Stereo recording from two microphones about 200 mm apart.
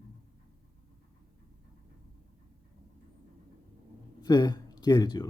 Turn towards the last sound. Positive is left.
turn(degrees=20)  # may be behind; listen again after turning